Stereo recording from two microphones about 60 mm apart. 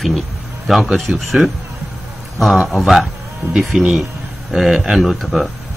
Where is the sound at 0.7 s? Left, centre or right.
Centre.